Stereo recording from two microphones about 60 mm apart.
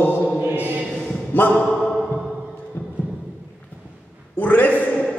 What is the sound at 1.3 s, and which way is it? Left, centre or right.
Speech, left.